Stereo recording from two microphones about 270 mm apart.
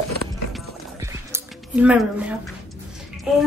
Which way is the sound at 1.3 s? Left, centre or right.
Centre.